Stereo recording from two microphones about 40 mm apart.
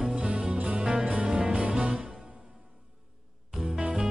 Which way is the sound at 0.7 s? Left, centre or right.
Centre.